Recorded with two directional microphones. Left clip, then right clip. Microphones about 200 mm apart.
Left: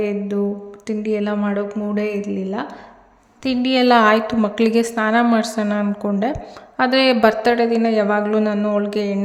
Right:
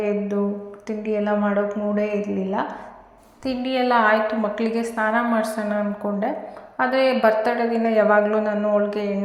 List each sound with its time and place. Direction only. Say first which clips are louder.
0.0 s a woman's voice: left 2 dB; 30° left (ahead or behind)
3.4 s a woman's voice: left 5 dB; 45° left (ahead or behind)